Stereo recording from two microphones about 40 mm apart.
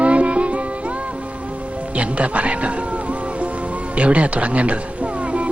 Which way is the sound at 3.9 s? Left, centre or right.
Right.